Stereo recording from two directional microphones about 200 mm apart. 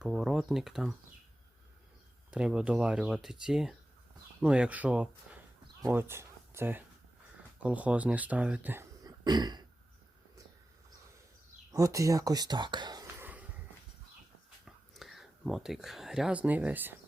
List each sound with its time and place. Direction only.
0.0 s speech: centre (ahead or behind)
2.3 s speech: 5° right (ahead or behind); by 9.6 s 20° right (ahead or behind)
11.7 s speech: 15° right (ahead or behind)
13.2 s a sound: 10° right (ahead or behind)
14.6 s whispering: centre (ahead or behind)